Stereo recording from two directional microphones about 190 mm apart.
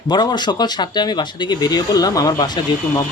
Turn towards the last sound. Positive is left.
turn(degrees=20)  # may be behind; listen again after turning